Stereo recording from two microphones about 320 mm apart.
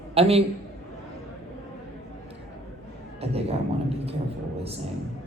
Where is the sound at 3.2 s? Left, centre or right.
Centre.